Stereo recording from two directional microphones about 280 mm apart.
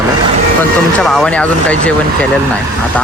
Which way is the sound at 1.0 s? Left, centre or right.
Centre.